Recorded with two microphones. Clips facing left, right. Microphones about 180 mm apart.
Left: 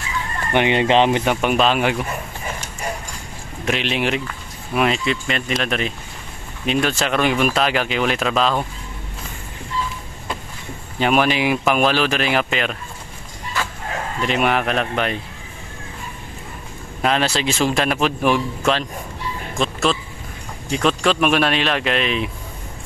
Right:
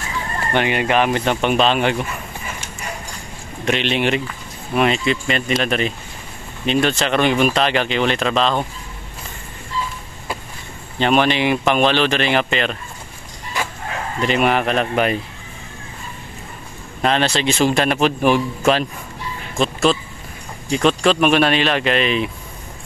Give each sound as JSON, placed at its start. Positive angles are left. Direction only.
{"t": 0.5, "sound": "speech", "side_deg": 20}
{"t": 1.2, "sound": "speech", "side_deg": 5}
{"t": 3.6, "sound": "speech", "side_deg": 5}
{"t": 11.0, "sound": "speech", "side_deg": 5}
{"t": 14.2, "sound": "speech", "side_deg": 0}
{"t": 17.0, "sound": "speech", "side_deg": 5}